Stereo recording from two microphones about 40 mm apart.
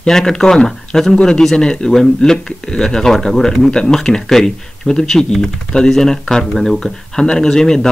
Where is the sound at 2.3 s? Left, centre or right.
Centre.